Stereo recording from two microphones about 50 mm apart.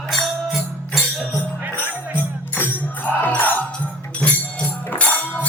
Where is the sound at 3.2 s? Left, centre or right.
Left.